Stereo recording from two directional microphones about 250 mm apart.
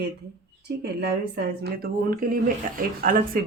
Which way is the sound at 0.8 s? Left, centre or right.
Right.